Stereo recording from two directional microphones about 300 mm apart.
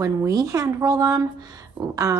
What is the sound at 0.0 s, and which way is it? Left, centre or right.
Speech, centre.